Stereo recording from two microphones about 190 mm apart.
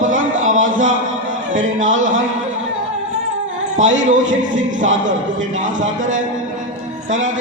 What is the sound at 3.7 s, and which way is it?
Speech, 40° right (ahead or behind).